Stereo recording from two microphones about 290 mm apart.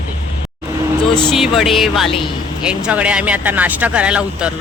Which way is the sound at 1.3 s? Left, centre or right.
Centre.